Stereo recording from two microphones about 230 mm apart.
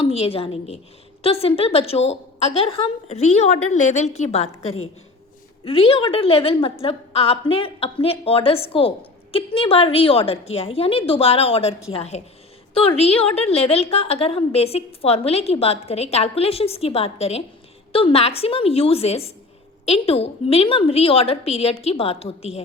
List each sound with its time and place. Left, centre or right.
0.0 s a woman's voice: left